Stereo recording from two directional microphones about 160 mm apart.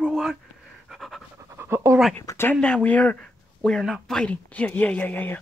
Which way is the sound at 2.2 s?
15° left (ahead or behind).